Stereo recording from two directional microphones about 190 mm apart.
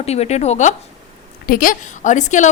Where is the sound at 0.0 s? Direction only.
35° left (ahead or behind).